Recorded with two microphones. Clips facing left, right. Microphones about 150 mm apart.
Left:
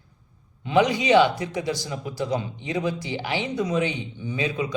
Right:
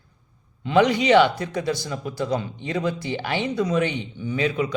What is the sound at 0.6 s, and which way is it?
A man's voice, 15° left (ahead or behind).